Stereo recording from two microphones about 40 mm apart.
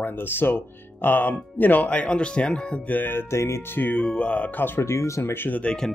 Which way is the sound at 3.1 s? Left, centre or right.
Left.